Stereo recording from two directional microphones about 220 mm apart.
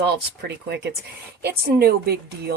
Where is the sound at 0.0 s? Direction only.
50° right (ahead or behind).